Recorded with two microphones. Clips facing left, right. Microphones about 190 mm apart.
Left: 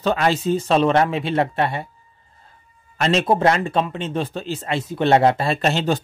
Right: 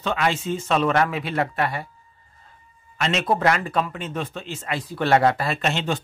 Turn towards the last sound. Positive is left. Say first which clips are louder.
# left 5 dB
turn(degrees=35)  # may be behind; listen again after turning